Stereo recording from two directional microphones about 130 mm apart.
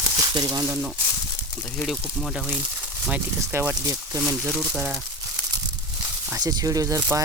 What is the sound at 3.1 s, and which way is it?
Speech, 15° right (ahead or behind).